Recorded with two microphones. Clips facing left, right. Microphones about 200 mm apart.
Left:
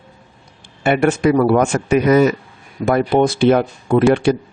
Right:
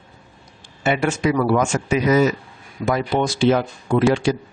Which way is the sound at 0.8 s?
55° left (ahead or behind).